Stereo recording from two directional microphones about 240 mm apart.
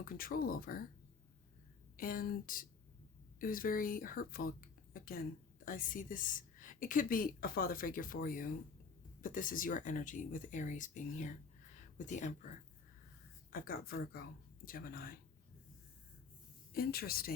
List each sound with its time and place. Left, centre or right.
0.0 s speech: left
2.0 s speech: left
13.5 s speech: left
16.7 s speech: left